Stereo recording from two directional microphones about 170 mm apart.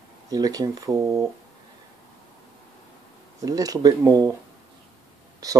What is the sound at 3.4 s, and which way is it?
Speech, 20° right (ahead or behind).